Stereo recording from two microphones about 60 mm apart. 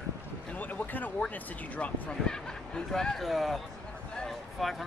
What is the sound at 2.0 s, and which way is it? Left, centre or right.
Speech, centre.